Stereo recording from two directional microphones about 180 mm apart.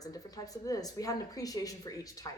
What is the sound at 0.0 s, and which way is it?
Speech, 20° left (ahead or behind).